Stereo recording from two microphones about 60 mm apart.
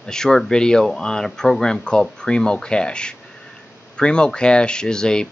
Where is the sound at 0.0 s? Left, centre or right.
Centre.